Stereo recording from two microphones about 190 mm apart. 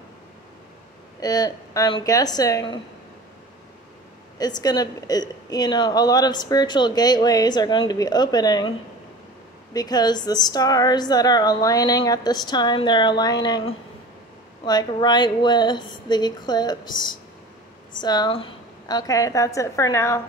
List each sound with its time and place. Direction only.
1.2 s speech: 20° left (ahead or behind)
4.4 s speech: 20° left (ahead or behind)
9.8 s a woman's voice: 20° left (ahead or behind)